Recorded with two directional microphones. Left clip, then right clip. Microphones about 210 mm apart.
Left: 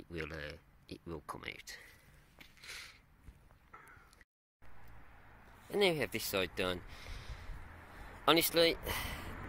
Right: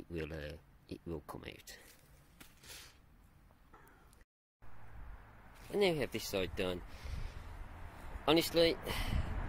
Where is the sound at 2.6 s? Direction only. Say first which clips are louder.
Left 6 dB; 15° right (ahead or behind).